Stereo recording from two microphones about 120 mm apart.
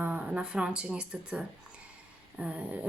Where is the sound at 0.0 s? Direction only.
15° right (ahead or behind).